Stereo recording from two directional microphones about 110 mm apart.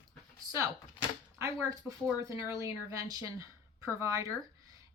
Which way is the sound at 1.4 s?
30° right (ahead or behind).